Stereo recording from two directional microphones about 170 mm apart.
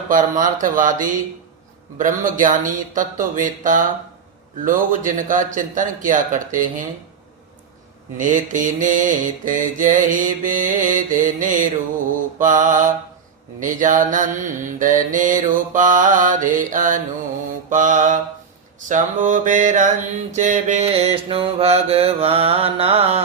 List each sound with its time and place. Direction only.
0.1 s mantra: 50° right (ahead or behind)
8.2 s mantra: 50° right (ahead or behind)